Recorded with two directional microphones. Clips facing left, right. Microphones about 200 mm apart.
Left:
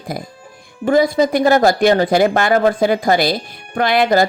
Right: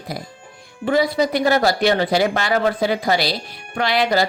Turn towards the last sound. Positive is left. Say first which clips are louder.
# left 4 dB
turn(degrees=50)  # may be behind; listen again after turning